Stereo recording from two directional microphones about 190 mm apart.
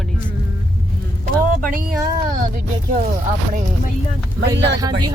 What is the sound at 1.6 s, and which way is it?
Speech, 45° right (ahead or behind).